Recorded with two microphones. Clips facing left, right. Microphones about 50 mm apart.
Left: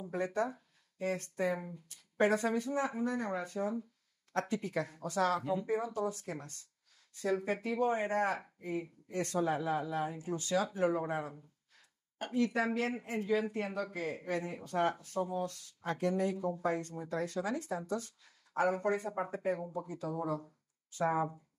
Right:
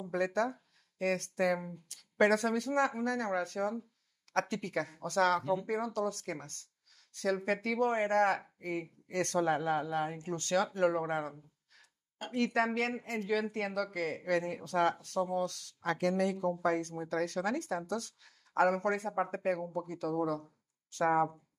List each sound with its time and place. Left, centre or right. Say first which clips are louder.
0.1 s speech: right 3 dB; right
7.4 s speech: right 1 dB; right